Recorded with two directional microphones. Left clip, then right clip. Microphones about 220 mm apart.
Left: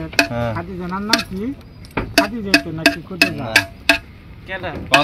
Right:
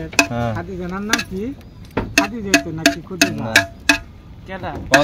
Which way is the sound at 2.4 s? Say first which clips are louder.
Left 1 dB; 10° left (ahead or behind).